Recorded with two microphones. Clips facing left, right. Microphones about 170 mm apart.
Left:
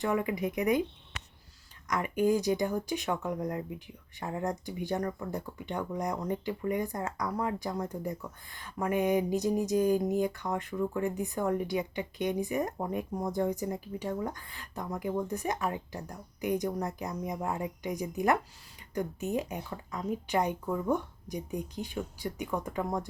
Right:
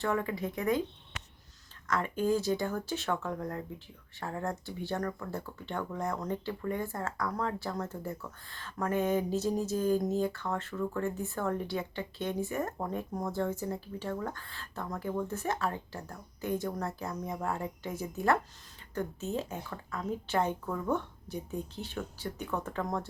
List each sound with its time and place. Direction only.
0.0 s speech: 15° left (ahead or behind)
1.9 s speech: 15° left (ahead or behind)